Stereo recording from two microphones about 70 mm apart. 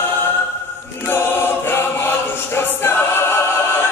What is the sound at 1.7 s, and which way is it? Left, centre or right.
Choir, left.